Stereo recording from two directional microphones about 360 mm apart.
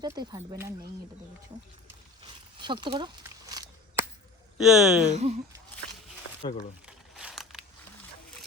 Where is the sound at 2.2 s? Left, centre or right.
Centre.